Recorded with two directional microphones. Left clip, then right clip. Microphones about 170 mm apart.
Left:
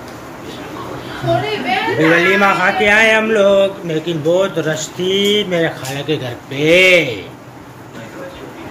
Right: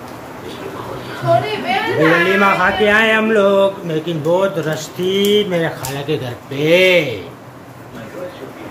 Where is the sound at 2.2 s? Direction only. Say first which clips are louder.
Left 1 dB; 10° right (ahead or behind).